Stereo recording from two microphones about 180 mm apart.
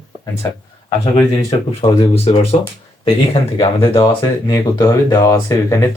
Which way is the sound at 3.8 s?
25° left (ahead or behind).